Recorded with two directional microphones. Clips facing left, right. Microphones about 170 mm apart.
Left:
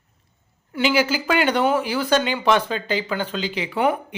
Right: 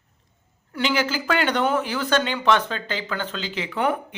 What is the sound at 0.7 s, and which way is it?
Speech, 10° left (ahead or behind).